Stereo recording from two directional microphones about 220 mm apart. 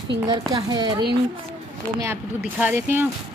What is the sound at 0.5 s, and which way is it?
Speech, 20° right (ahead or behind).